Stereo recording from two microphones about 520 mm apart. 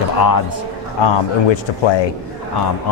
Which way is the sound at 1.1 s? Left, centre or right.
Left.